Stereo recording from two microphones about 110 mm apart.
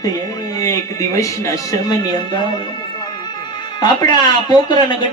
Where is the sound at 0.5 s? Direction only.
30° left (ahead or behind).